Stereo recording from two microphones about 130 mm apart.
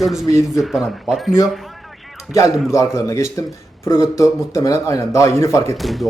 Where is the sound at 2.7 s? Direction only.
25° left (ahead or behind).